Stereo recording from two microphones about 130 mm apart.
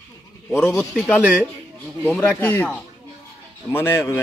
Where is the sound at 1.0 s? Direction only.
5° left (ahead or behind).